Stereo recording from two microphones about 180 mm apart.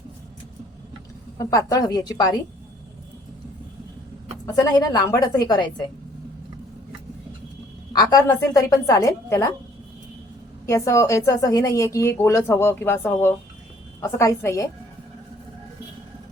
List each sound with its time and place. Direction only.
1.4 s a woman's voice: 20° left (ahead or behind)
4.5 s a woman's voice: 20° left (ahead or behind)
7.9 s a woman's voice: 20° left (ahead or behind)
10.7 s a woman's voice: 15° left (ahead or behind)